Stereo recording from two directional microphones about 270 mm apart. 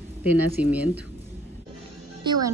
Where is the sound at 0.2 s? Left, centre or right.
Centre.